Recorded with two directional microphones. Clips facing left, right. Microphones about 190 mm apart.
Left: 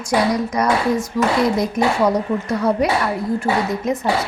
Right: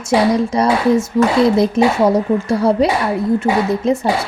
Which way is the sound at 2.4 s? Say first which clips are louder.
Right 4 dB; 30° right (ahead or behind).